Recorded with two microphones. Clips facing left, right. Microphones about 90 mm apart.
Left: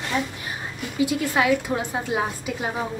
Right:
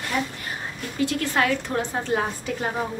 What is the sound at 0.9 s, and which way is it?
A woman's voice, 10° left (ahead or behind).